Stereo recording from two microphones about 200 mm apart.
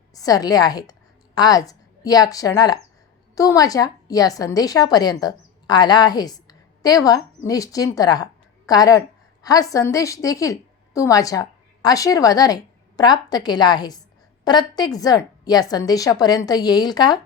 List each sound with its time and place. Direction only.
0.1 s a woman's voice: 20° left (ahead or behind)